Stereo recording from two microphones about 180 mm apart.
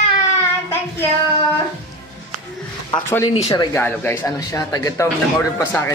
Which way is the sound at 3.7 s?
10° left (ahead or behind).